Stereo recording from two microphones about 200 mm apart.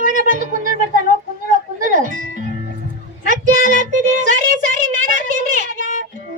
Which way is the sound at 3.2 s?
40° right (ahead or behind).